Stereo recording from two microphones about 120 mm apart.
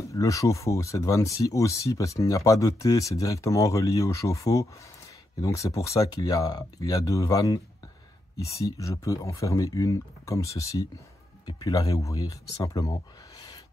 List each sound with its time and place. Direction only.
0.1 s speech: 25° left (ahead or behind)